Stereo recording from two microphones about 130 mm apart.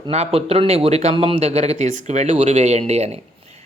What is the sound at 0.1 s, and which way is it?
A man's voice, 55° right (ahead or behind).